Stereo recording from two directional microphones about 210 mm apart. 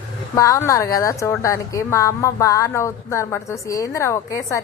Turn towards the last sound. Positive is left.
turn(degrees=15)  # may be behind; listen again after turning